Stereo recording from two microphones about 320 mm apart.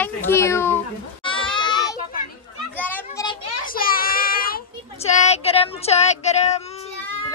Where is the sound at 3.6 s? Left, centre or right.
Left.